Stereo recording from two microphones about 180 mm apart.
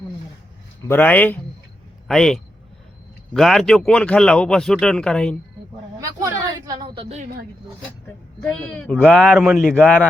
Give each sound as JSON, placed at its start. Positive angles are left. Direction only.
{"t": 0.9, "sound": "speech", "side_deg": 10}
{"t": 6.0, "sound": "a sound", "side_deg": -20}
{"t": 8.4, "sound": "speech", "side_deg": 5}
{"t": 9.3, "sound": "speech", "side_deg": -5}